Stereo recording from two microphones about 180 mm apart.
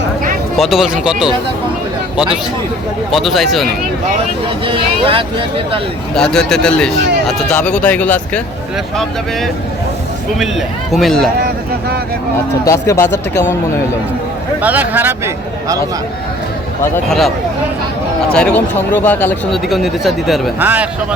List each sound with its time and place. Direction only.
0.5 s speech: centre (ahead or behind)
3.1 s speech: centre (ahead or behind)
4.6 s speech: 30° right (ahead or behind)
6.1 s speech: 5° left (ahead or behind)
10.9 s speech: centre (ahead or behind)
11.3 s speech: 60° right (ahead or behind)
12.6 s speech: 15° left (ahead or behind)
14.6 s speech: 10° right (ahead or behind)
17.1 s speech: centre (ahead or behind)